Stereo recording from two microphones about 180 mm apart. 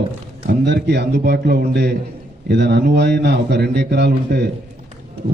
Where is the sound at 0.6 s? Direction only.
75° right (ahead or behind).